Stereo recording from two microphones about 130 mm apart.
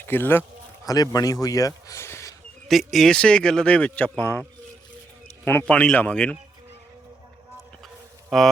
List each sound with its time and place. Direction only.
0.0 s speech: 15° left (ahead or behind)
0.9 s speech: 30° left (ahead or behind)
2.6 s speech: centre (ahead or behind)
5.5 s speech: 15° left (ahead or behind)
8.3 s speech: centre (ahead or behind)